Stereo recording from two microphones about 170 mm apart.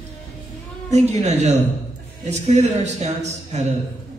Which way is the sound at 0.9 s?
40° right (ahead or behind).